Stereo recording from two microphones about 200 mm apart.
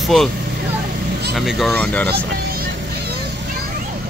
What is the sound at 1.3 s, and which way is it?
Speech, centre (ahead or behind).